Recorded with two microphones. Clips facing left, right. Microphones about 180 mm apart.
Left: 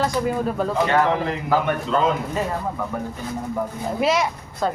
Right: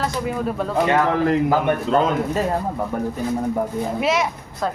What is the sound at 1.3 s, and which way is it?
Speech, 45° right (ahead or behind).